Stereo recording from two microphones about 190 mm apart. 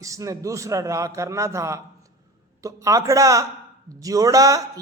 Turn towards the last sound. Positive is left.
turn(degrees=-15)  # may be behind; listen again after turning